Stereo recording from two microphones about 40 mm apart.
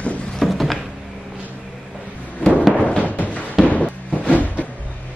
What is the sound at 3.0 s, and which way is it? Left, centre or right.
Music, left.